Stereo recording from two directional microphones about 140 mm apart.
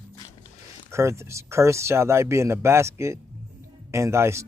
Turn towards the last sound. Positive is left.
turn(degrees=-20)  # may be behind; listen again after turning